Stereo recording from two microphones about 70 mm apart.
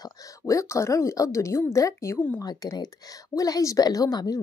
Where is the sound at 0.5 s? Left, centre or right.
Left.